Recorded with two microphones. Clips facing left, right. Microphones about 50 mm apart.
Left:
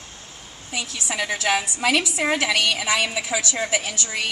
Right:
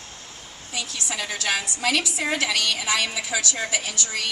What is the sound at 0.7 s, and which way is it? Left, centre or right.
A woman's voice, left.